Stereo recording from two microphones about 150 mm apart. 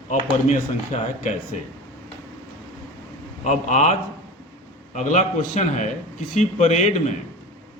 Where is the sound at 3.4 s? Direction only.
50° left (ahead or behind).